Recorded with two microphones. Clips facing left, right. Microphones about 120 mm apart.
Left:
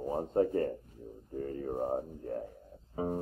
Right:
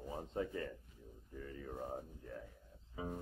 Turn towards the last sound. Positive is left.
turn(degrees=45)  # may be behind; listen again after turning